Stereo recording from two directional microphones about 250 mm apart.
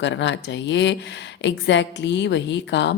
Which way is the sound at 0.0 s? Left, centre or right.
Left.